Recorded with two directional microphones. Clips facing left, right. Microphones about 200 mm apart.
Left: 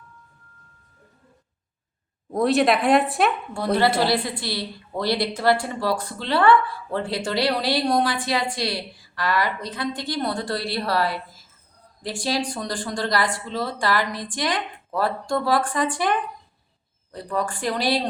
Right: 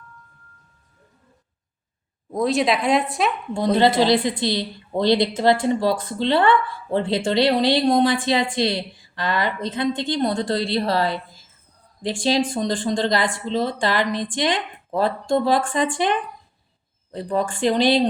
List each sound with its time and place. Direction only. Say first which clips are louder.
2.3 s speech: left 1 dB; centre (ahead or behind)
3.5 s a woman's voice: right 3 dB; 20° right (ahead or behind)
12.2 s a woman's voice: right 5 dB; 25° right (ahead or behind)